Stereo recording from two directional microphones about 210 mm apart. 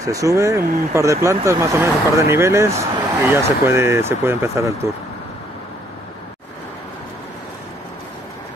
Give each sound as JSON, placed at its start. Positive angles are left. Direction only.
{"t": 0.0, "sound": "speech", "side_deg": -15}